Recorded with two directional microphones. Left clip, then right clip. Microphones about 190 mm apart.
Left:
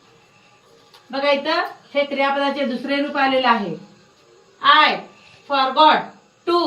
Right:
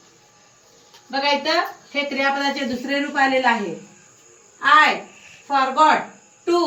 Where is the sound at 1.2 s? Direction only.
Centre (ahead or behind).